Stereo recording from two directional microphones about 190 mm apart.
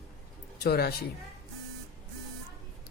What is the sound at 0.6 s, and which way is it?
Speech, 55° left (ahead or behind).